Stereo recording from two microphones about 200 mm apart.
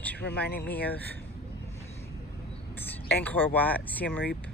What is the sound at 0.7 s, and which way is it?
Speech, 10° left (ahead or behind).